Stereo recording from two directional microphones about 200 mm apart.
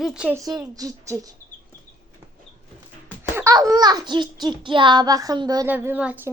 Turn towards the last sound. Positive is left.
turn(degrees=-10)  # may be behind; listen again after turning